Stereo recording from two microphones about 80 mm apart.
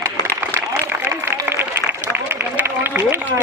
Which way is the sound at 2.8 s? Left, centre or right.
Right.